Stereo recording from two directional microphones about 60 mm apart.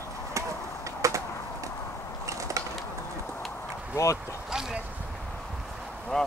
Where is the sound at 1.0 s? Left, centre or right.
Right.